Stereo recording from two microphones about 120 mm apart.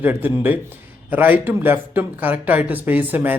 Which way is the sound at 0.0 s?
15° right (ahead or behind).